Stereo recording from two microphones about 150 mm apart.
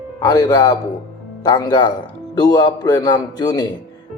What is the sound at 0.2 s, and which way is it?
A man's voice, 25° left (ahead or behind).